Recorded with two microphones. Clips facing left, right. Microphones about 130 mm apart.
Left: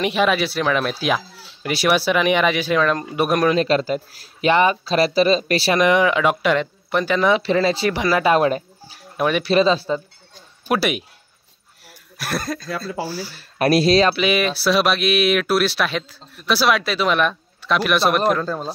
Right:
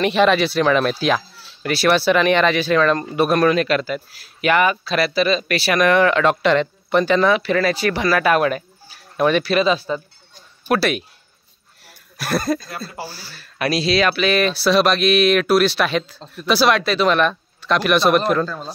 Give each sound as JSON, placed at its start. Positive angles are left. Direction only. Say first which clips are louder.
{"t": 0.0, "sound": "speech", "louder": "right 3 dB", "side_deg": 10}
{"t": 3.5, "sound": "speech", "louder": "left 1 dB", "side_deg": 30}
{"t": 5.8, "sound": "speech", "louder": "right 2 dB", "side_deg": 15}
{"t": 7.2, "sound": "speech", "louder": "even", "side_deg": 25}
{"t": 9.1, "sound": "speech", "louder": "right 3 dB", "side_deg": 10}
{"t": 9.4, "sound": "speech", "louder": "left 1 dB", "side_deg": 30}
{"t": 10.7, "sound": "speech", "louder": "right 2 dB", "side_deg": 15}
{"t": 11.8, "sound": "a sound", "louder": "right 2 dB", "side_deg": 0}
{"t": 13.2, "sound": "speech", "louder": "left 9 dB", "side_deg": 15}
{"t": 13.6, "sound": "speech", "louder": "left 4 dB", "side_deg": 50}
{"t": 14.1, "sound": "speech", "louder": "right 1 dB", "side_deg": 10}